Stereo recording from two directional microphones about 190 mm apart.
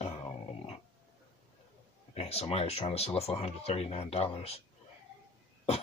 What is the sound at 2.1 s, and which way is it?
Speech, 35° left (ahead or behind).